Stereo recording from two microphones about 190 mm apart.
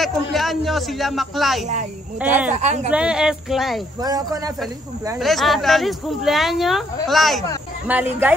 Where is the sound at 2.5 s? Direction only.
35° right (ahead or behind).